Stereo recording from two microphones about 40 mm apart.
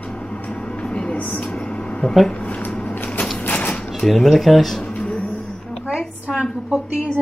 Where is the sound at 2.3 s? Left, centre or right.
Left.